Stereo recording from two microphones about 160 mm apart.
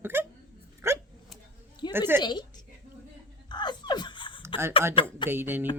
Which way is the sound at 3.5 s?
25° left (ahead or behind).